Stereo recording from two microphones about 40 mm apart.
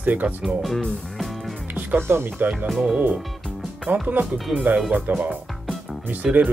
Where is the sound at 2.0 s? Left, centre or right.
Right.